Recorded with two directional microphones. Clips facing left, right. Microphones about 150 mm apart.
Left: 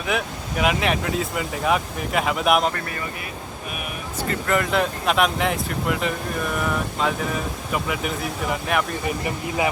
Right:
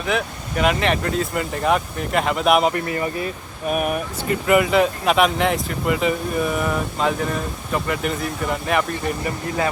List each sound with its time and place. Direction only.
0.0 s speech: 5° left (ahead or behind)
2.7 s speech: 25° right (ahead or behind)
3.7 s speech: 45° right (ahead or behind)
4.3 s speech: 10° right (ahead or behind)